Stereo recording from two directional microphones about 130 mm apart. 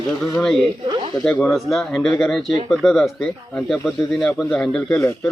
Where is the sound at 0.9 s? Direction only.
35° right (ahead or behind).